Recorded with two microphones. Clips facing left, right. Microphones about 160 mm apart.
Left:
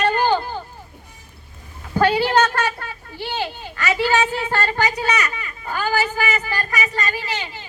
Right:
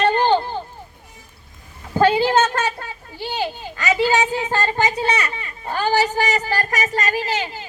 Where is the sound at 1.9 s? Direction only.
20° right (ahead or behind).